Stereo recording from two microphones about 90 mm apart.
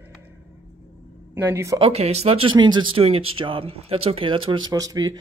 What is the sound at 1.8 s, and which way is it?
Speech, 90° right.